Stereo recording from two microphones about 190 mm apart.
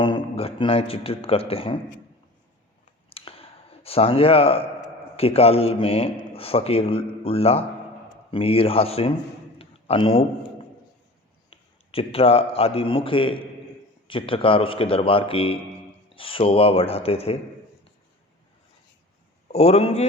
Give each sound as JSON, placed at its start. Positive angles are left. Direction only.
{"t": 0.0, "sound": "a man's voice", "side_deg": 30}
{"t": 3.1, "sound": "a sound", "side_deg": 30}
{"t": 5.1, "sound": "speech", "side_deg": 30}
{"t": 9.6, "sound": "a sound", "side_deg": 30}
{"t": 11.5, "sound": "a man's voice", "side_deg": 30}
{"t": 19.5, "sound": "speech", "side_deg": 30}